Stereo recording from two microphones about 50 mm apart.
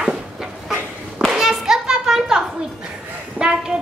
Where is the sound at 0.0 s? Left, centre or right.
Centre.